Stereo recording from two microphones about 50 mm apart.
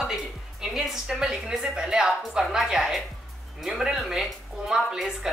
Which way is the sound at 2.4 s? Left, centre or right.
Centre.